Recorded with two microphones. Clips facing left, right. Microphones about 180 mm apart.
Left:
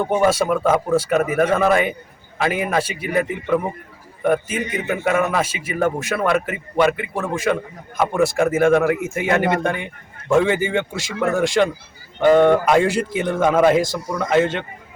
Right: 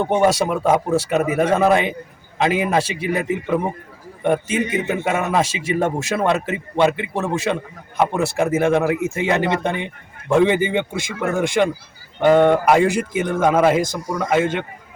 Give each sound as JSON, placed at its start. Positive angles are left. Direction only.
{"t": 0.0, "sound": "a man's voice", "side_deg": -25}